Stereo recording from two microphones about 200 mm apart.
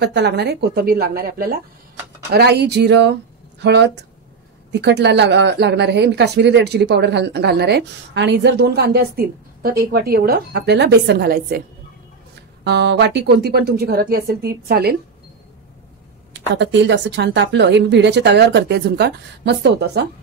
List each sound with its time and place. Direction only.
0.0 s speech: 55° right (ahead or behind)
12.6 s speech: 60° right (ahead or behind)
16.3 s speech: 60° right (ahead or behind)